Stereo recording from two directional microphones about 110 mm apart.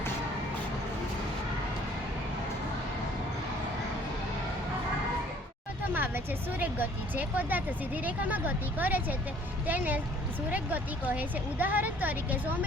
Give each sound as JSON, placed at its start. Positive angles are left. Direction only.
{"t": 5.9, "sound": "speech", "side_deg": -15}